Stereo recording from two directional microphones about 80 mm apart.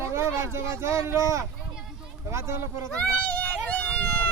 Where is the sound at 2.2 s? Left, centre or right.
Right.